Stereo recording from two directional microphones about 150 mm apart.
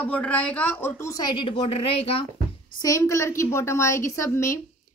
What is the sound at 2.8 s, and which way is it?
A woman's voice, 20° left (ahead or behind).